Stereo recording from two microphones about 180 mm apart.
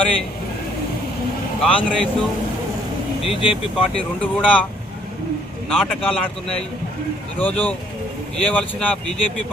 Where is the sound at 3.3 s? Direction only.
30° left (ahead or behind).